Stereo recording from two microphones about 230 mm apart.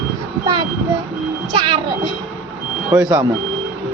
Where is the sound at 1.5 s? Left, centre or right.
Right.